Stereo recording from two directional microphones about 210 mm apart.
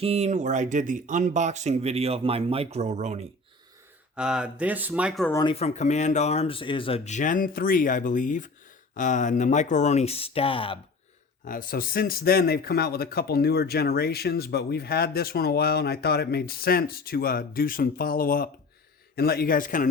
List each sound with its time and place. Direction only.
0.0 s speech: 30° right (ahead or behind)
4.1 s speech: 5° right (ahead or behind)
5.3 s speech: 20° left (ahead or behind)
5.5 s speech: 30° left (ahead or behind)
11.4 s speech: 40° left (ahead or behind)